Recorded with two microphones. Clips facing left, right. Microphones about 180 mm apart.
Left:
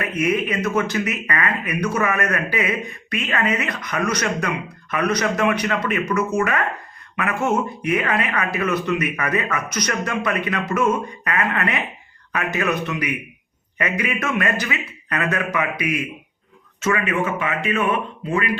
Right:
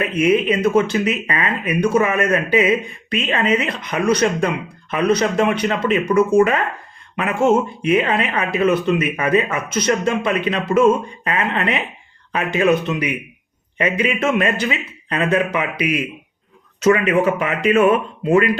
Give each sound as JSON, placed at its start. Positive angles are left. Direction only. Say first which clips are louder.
{"t": 0.0, "sound": "speech", "louder": "right 5 dB", "side_deg": -30}
{"t": 18.3, "sound": "speech", "louder": "right 9 dB", "side_deg": -25}